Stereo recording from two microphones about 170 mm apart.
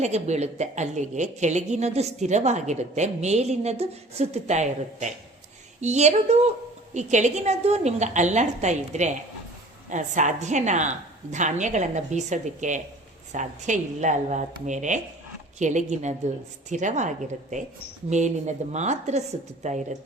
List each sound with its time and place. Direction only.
0.0 s a woman's voice: 40° right (ahead or behind)